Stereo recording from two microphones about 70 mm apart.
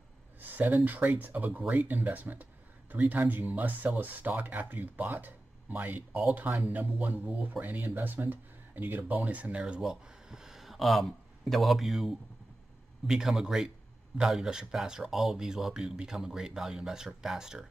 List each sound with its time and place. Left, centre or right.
0.4 s a sound: right
0.8 s speech: right
9.8 s speech: centre